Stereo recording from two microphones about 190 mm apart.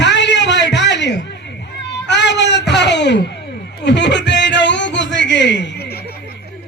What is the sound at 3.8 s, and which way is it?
Music, 65° left (ahead or behind).